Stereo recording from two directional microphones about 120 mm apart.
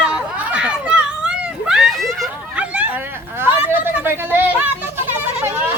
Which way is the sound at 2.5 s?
10° right (ahead or behind).